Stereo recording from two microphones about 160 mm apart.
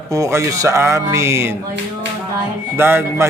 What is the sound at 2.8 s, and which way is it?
Speech, 15° right (ahead or behind).